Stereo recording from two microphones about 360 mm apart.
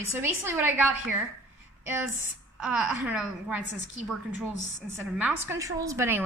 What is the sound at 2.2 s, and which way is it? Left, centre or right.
A woman's voice, centre.